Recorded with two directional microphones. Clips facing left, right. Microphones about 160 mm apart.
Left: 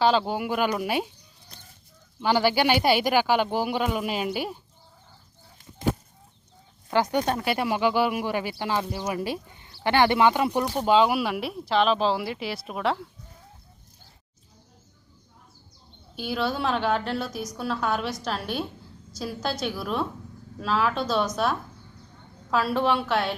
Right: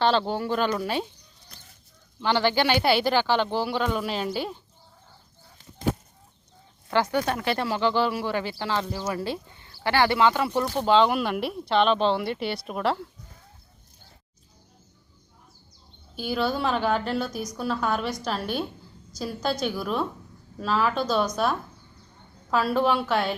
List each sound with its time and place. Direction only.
0.0 s speech: 5° left (ahead or behind)
2.2 s speech: 10° left (ahead or behind)
6.9 s a woman's voice: 15° left (ahead or behind); by 13.1 s centre (ahead or behind)
16.1 s a woman's voice: centre (ahead or behind)